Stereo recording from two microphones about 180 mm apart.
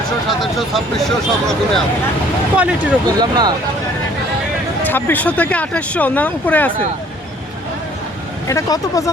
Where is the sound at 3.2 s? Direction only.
25° right (ahead or behind).